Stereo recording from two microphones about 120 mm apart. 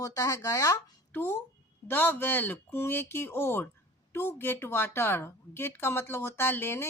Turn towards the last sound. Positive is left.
turn(degrees=20)  # may be behind; listen again after turning